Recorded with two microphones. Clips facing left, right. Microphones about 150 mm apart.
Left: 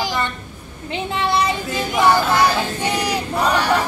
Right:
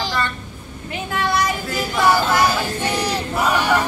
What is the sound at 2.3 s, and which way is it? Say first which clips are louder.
Child singing: left 1 dB; 15° left (ahead or behind).